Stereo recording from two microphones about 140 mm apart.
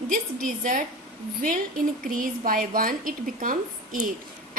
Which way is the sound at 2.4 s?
85° right.